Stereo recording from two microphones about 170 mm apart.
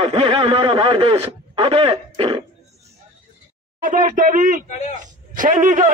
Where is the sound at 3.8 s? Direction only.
50° right (ahead or behind).